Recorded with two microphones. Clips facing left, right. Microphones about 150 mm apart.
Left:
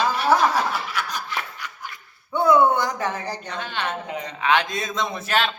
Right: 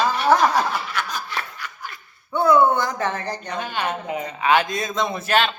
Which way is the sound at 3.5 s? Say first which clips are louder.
Right 3 dB; 10° right (ahead or behind).